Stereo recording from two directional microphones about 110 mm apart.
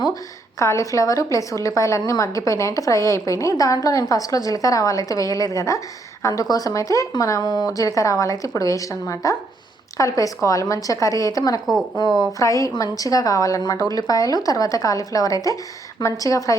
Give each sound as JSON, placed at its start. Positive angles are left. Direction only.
{"t": 0.6, "sound": "a woman's voice", "side_deg": 30}